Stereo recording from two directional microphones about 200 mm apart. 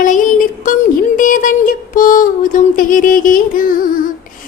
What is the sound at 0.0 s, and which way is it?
Music, 40° left (ahead or behind).